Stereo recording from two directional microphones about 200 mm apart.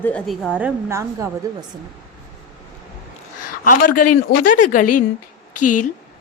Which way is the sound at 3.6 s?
45° left (ahead or behind).